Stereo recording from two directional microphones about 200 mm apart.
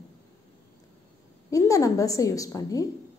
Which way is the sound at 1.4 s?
15° left (ahead or behind).